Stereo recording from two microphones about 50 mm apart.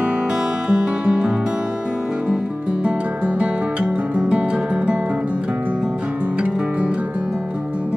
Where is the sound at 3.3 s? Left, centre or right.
Right.